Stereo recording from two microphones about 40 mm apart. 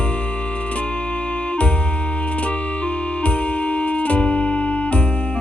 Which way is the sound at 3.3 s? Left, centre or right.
Left.